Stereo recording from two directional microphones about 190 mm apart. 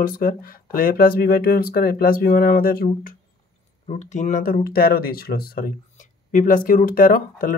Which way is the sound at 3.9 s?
40° left (ahead or behind).